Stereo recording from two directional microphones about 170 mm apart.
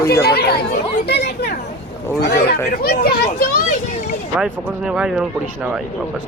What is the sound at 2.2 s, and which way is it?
Speech, 70° left (ahead or behind).